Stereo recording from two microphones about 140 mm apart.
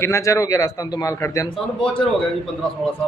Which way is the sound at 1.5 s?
40° left (ahead or behind).